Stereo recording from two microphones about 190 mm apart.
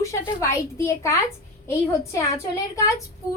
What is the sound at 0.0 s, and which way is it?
A woman's voice, 15° left (ahead or behind).